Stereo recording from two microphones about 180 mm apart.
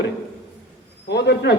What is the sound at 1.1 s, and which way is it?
Speech, 70° left (ahead or behind).